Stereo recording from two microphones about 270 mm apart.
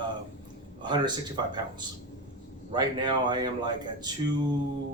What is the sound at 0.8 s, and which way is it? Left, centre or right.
A man's voice, centre.